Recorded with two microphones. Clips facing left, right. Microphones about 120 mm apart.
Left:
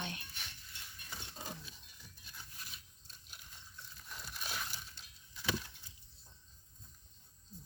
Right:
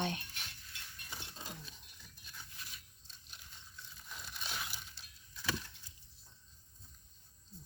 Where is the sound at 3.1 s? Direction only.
5° left (ahead or behind).